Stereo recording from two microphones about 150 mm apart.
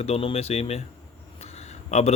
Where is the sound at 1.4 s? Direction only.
45° left (ahead or behind).